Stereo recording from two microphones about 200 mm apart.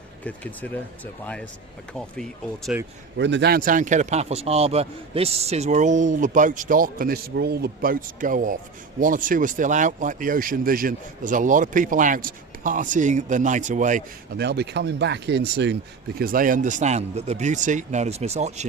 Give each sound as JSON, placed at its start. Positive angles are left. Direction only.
{"t": 0.3, "sound": "speech", "side_deg": 10}
{"t": 3.2, "sound": "speech", "side_deg": -60}
{"t": 14.3, "sound": "speech", "side_deg": -55}